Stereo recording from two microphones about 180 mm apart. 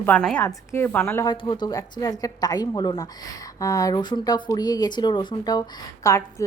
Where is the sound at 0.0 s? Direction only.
5° left (ahead or behind).